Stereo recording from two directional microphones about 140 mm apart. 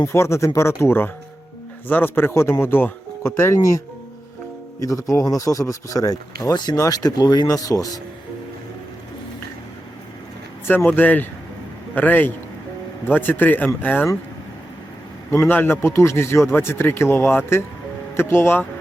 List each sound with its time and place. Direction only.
0.0 s speech: 20° left (ahead or behind)
4.8 s speech: 25° left (ahead or behind)
10.7 s speech: 15° left (ahead or behind)
15.3 s speech: 20° left (ahead or behind)